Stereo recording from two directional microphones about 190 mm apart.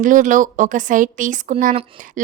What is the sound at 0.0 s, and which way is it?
A woman's voice, 45° right (ahead or behind).